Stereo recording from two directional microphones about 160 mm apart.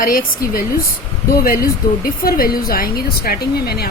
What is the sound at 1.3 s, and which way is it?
A woman's voice, 65° left (ahead or behind).